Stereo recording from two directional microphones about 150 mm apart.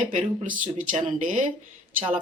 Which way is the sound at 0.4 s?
60° right (ahead or behind).